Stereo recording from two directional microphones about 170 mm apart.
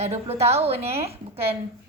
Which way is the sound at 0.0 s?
40° right (ahead or behind).